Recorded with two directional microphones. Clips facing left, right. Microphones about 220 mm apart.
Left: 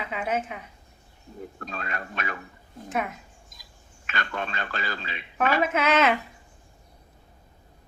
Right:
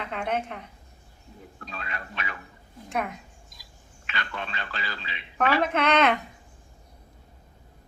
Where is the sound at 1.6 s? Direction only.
45° left (ahead or behind).